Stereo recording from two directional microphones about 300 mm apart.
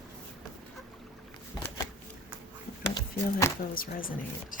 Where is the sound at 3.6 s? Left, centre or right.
Left.